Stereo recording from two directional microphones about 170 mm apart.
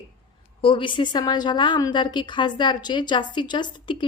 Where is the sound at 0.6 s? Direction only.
30° left (ahead or behind).